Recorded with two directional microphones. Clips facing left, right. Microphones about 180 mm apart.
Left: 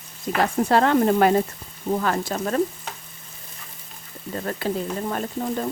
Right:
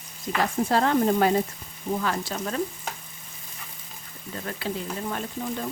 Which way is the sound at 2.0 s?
50° left (ahead or behind).